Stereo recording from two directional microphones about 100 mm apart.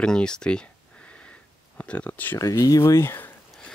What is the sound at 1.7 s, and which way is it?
Speech, 10° left (ahead or behind).